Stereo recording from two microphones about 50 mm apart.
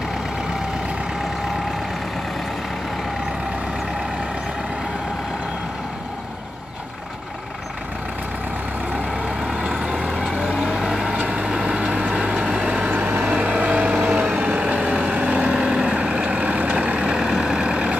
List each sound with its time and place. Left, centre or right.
9.6 s vehicle: centre
13.0 s vehicle: right
14.6 s vehicle: centre
14.9 s vehicle: right
17.1 s vehicle: centre